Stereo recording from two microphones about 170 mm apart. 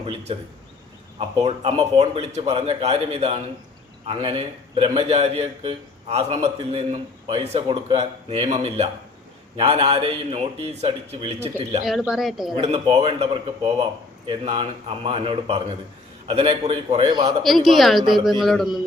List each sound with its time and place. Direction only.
0.0 s a man's voice: 35° right (ahead or behind)
11.9 s speech: centre (ahead or behind)
12.5 s a man's voice: 35° right (ahead or behind)
17.4 s speech: centre (ahead or behind)